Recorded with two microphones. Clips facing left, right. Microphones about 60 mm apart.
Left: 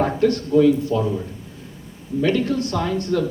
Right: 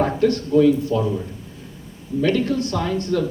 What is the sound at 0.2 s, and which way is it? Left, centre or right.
Speech, left.